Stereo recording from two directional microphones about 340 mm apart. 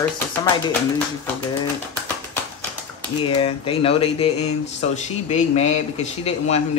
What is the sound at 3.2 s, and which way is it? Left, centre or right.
A man's voice, centre.